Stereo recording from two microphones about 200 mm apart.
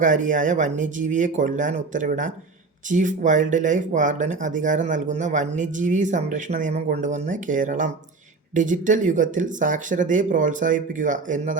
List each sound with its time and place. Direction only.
0.0 s speech: 40° right (ahead or behind)